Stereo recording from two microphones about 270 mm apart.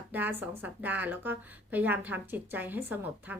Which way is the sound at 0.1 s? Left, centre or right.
Centre.